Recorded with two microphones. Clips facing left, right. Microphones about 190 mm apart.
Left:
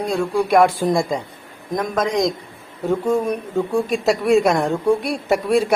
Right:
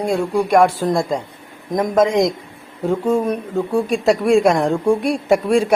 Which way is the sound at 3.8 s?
5° left (ahead or behind).